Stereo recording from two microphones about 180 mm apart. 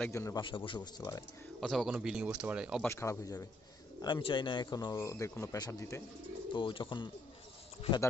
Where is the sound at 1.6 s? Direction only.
Centre (ahead or behind).